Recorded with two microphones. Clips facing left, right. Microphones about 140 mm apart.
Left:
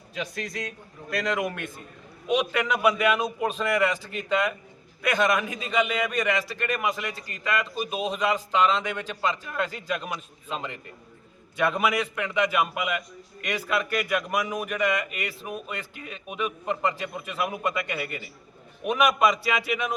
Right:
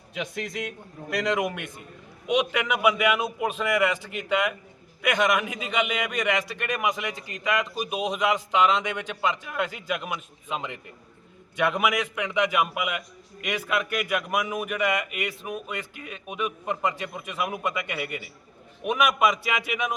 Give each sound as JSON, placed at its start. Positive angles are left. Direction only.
{"t": 0.1, "sound": "a man's voice", "side_deg": -20}